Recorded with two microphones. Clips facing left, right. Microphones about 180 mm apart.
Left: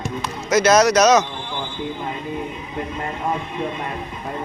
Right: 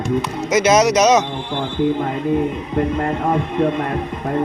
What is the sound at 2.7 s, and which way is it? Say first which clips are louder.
Speech: right 9 dB; 60° right (ahead or behind).